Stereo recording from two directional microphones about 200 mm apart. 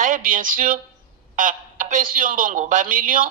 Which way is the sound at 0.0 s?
40° right (ahead or behind).